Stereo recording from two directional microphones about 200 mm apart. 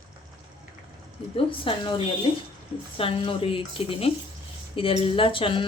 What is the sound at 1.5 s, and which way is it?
Speech, 25° left (ahead or behind).